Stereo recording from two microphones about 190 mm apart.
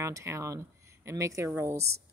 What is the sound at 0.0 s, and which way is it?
A woman's voice, 15° right (ahead or behind).